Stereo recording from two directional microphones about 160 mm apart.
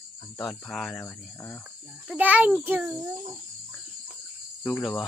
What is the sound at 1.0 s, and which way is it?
Speech, 15° left (ahead or behind).